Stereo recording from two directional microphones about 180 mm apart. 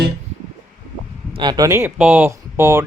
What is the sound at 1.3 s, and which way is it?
Speech, 25° right (ahead or behind).